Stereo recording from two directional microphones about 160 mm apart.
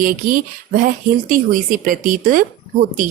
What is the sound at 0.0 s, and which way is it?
A woman's voice, 55° right (ahead or behind).